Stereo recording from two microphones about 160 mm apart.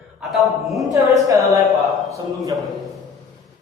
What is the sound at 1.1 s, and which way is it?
Speech, 20° right (ahead or behind).